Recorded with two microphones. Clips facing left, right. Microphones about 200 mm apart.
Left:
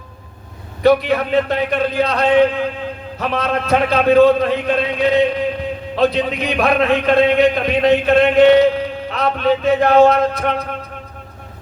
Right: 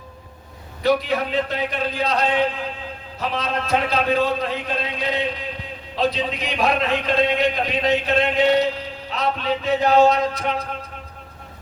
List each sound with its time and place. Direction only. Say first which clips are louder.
0.8 s a man's voice: left 6 dB; 60° left (ahead or behind)